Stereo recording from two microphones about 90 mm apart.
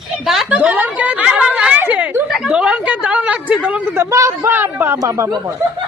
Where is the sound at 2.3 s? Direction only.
5° right (ahead or behind); by 4.9 s 25° right (ahead or behind).